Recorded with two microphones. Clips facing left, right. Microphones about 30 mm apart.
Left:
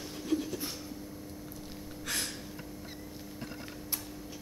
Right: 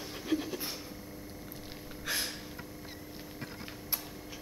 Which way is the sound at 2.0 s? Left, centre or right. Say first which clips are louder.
Right 1 dB; centre.